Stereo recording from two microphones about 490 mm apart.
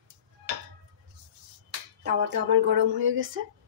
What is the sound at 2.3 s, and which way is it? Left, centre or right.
Speech, right.